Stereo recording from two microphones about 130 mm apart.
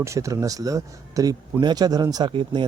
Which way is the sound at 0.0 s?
25° right (ahead or behind).